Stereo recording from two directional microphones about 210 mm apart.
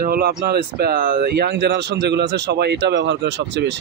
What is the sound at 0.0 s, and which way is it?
Speech, 45° right (ahead or behind).